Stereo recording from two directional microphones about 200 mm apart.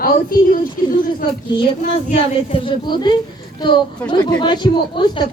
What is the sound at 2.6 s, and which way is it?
Speech, 20° left (ahead or behind).